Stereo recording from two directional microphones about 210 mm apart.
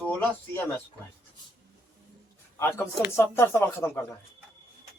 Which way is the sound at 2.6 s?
10° left (ahead or behind).